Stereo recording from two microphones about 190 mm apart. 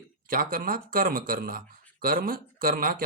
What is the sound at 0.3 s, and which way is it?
Speech, 50° right (ahead or behind).